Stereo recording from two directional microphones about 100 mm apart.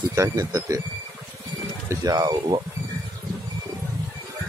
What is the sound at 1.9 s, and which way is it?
Speech, 35° right (ahead or behind).